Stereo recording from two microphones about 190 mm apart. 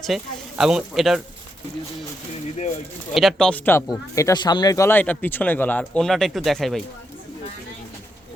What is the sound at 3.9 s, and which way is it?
Speech, 20° left (ahead or behind).